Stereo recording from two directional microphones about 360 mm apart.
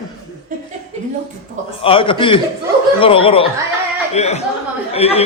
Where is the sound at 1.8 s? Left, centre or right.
Centre.